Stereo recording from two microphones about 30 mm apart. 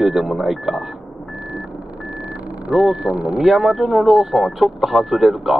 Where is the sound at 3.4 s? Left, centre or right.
Centre.